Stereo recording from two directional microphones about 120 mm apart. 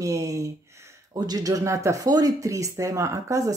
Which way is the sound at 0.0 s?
30° right (ahead or behind).